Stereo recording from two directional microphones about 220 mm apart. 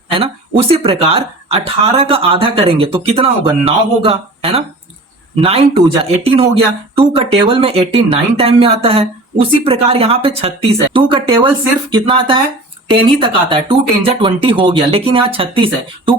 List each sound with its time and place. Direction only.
0.1 s speech: 25° right (ahead or behind)